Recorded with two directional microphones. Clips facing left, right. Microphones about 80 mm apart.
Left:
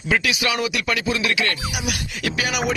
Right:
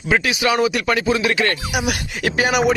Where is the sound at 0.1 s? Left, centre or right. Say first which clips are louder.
Right 4 dB; right.